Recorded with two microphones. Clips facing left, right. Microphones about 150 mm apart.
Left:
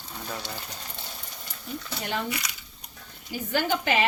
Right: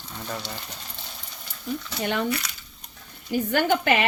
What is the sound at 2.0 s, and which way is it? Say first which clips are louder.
Speech: right 5 dB; 70° right (ahead or behind).